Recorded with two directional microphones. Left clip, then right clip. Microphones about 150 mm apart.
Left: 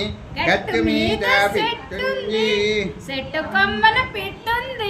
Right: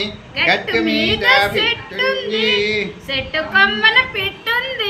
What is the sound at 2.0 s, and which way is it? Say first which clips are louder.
Child singing: right 5 dB; 25° left (ahead or behind).